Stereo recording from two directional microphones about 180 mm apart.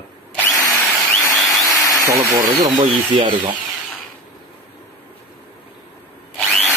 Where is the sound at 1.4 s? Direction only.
Centre (ahead or behind).